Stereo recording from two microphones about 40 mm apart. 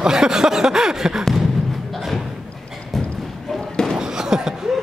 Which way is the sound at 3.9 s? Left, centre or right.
Centre.